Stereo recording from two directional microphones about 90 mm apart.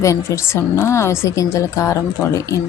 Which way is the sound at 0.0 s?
35° left (ahead or behind).